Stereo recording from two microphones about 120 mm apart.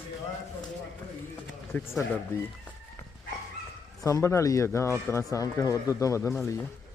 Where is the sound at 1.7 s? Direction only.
15° left (ahead or behind).